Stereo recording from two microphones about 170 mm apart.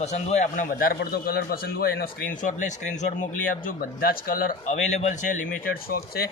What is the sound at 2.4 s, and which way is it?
Speech, 45° left (ahead or behind).